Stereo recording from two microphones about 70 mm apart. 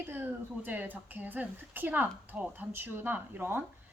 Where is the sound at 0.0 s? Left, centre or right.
Right.